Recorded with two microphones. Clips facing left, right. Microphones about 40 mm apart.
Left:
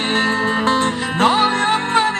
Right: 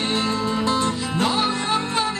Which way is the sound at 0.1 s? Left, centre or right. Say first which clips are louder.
Left 8 dB; left.